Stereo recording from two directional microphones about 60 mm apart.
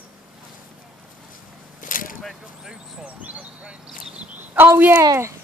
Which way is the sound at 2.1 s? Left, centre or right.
Centre.